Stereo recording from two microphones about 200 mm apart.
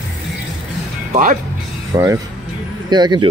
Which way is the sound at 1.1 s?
40° right (ahead or behind).